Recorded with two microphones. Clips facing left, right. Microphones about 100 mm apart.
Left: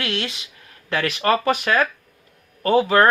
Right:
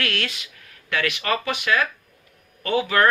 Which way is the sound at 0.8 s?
35° left (ahead or behind).